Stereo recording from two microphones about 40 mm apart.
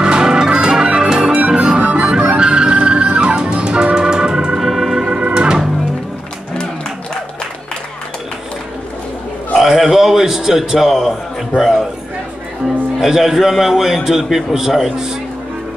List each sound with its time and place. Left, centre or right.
0.0 s organ: right
1.4 s music: right
4.6 s music: centre
5.0 s organ: right
9.6 s music: centre
13.0 s a man's voice: centre